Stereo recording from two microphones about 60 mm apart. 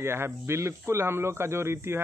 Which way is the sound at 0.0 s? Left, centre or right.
Right.